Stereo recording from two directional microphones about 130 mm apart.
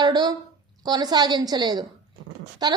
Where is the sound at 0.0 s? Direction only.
35° right (ahead or behind).